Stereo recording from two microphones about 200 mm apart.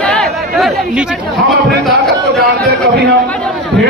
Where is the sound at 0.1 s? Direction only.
Centre (ahead or behind).